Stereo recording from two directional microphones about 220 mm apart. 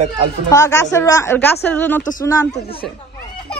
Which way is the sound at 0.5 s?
15° left (ahead or behind).